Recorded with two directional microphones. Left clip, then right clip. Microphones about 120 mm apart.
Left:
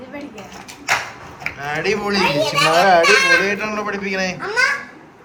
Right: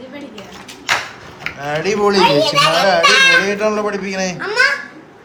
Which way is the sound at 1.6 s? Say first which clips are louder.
Right 5 dB; 25° right (ahead or behind).